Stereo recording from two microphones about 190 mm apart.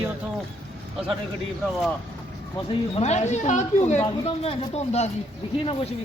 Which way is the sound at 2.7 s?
35° left (ahead or behind).